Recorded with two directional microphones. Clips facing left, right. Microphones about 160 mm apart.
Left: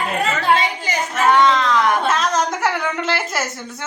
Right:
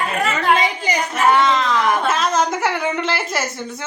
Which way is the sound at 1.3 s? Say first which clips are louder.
Left 2 dB; 5° right (ahead or behind).